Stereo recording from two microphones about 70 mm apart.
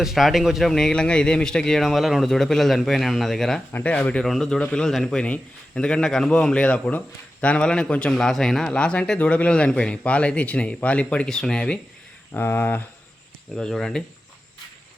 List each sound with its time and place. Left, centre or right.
0.0 s speech: centre
3.7 s speech: left
3.9 s speech: centre
12.3 s speech: left
13.6 s speech: centre